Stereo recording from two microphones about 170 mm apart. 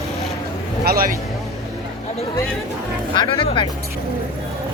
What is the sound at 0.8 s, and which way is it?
Speech, 60° right (ahead or behind).